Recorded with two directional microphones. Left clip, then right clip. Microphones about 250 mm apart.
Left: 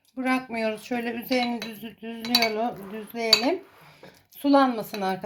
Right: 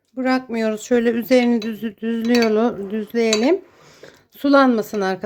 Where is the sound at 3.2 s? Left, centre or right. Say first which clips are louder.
Right 4 dB; right.